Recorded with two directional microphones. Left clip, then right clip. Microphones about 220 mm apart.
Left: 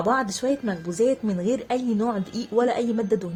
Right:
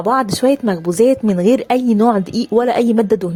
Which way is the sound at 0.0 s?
40° right (ahead or behind).